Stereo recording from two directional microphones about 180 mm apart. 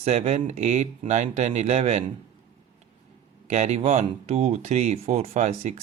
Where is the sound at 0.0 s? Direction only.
35° right (ahead or behind).